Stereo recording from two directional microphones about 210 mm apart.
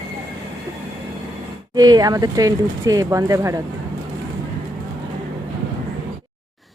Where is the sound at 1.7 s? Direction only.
20° right (ahead or behind).